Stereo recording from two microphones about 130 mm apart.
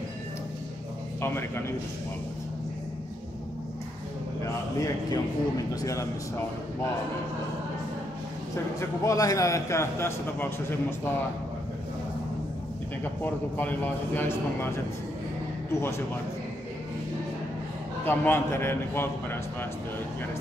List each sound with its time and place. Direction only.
1.2 s a man's voice: 20° left (ahead or behind)
4.4 s a man's voice: 25° left (ahead or behind)
8.7 s a man's voice: 25° left (ahead or behind)
13.0 s a man's voice: 15° left (ahead or behind)
18.0 s a man's voice: 15° left (ahead or behind)